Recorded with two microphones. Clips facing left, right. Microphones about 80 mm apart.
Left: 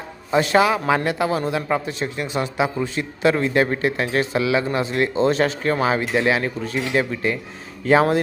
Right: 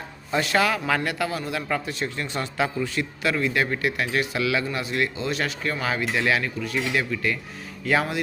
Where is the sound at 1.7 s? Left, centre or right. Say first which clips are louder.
Left 4 dB; left.